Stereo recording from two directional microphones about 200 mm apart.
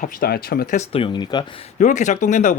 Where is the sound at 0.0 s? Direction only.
50° left (ahead or behind).